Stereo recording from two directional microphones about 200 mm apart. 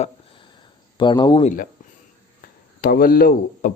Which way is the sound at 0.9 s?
20° left (ahead or behind).